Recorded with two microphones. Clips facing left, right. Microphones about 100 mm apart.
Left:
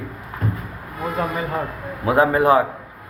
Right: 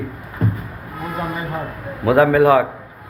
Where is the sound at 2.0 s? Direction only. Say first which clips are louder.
Right 3 dB; 25° left (ahead or behind).